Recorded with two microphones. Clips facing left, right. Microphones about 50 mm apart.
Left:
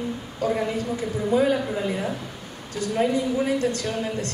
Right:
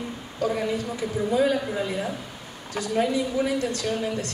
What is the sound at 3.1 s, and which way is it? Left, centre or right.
A woman's voice, left.